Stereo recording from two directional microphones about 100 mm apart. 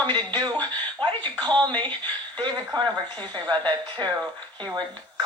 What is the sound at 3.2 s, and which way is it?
Speech, 50° right (ahead or behind).